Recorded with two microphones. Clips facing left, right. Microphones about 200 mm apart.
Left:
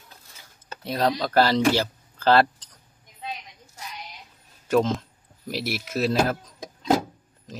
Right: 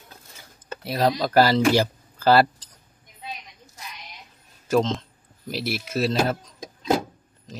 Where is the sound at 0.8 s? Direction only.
5° right (ahead or behind).